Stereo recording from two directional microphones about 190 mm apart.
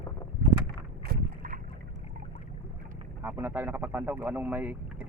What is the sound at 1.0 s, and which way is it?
Boat, 55° right (ahead or behind).